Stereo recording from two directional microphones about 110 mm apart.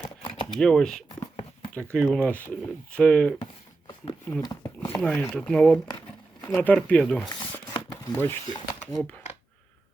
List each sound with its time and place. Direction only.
0.2 s shuffling cards: 50° left (ahead or behind)
0.6 s speech: 5° left (ahead or behind)
4.4 s a sound: 40° left (ahead or behind)
4.9 s speech: 5° left (ahead or behind)
7.3 s a sound: 40° left (ahead or behind)
8.1 s speech: 15° left (ahead or behind)